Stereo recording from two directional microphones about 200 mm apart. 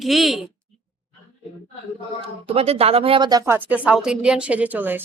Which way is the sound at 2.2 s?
30° right (ahead or behind).